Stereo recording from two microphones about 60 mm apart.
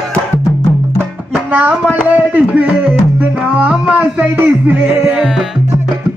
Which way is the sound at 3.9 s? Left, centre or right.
Right.